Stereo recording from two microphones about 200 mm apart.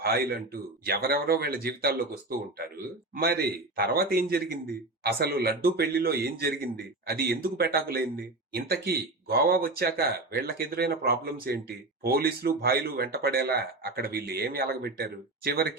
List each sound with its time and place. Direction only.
0.0 s a man's voice: 50° right (ahead or behind)